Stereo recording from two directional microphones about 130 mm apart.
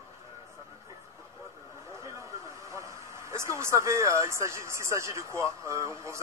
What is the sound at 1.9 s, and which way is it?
A man's voice, 25° right (ahead or behind).